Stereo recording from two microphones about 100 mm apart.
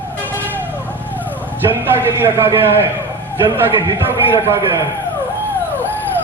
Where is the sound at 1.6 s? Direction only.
20° right (ahead or behind).